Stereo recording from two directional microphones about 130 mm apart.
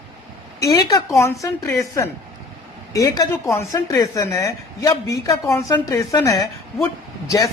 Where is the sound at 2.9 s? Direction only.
25° left (ahead or behind).